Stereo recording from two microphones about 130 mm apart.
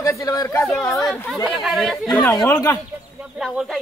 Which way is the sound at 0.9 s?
Centre (ahead or behind).